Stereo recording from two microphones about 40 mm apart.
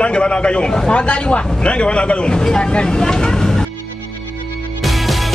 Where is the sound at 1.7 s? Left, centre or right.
Left.